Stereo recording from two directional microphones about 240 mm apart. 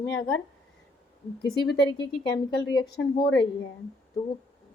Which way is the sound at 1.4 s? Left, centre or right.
Centre.